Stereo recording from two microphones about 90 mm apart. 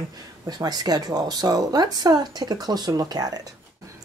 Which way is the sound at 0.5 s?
50° right (ahead or behind).